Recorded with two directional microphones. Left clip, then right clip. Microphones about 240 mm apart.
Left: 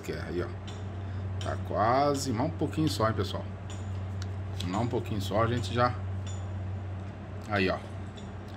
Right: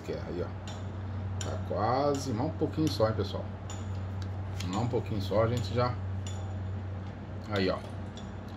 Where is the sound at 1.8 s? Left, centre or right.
Left.